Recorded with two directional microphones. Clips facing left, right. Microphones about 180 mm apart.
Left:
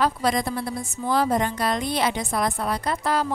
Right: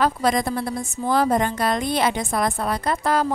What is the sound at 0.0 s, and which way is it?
A woman's voice, 50° right (ahead or behind).